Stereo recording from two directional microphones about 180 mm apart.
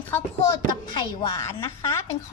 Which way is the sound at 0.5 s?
25° left (ahead or behind).